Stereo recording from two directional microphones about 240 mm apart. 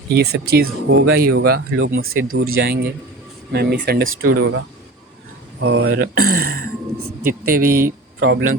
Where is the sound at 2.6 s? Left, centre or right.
Right.